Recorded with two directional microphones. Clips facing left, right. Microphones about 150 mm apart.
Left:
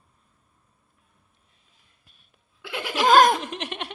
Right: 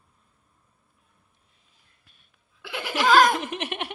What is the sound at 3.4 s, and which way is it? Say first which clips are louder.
Giggle: right 2 dB; 5° right (ahead or behind).